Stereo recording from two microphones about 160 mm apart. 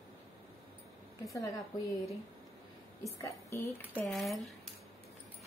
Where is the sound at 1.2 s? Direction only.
20° left (ahead or behind).